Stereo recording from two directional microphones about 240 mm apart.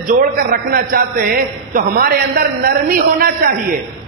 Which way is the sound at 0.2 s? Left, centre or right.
Right.